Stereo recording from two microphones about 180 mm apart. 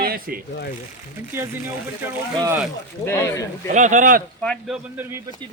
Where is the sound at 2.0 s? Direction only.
10° right (ahead or behind).